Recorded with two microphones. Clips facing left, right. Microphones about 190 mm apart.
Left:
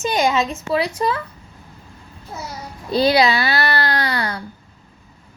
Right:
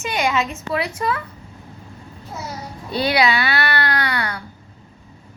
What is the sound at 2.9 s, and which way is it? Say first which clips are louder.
Babbling: left 3 dB; 40° left (ahead or behind).